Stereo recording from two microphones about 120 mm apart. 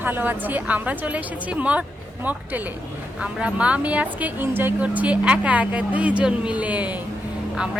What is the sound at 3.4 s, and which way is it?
A child's voice, 10° right (ahead or behind).